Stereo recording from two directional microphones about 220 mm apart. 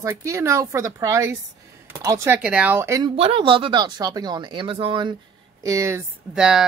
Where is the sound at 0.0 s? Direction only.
15° right (ahead or behind).